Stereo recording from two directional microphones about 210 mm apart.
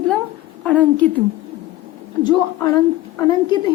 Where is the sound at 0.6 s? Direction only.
5° left (ahead or behind).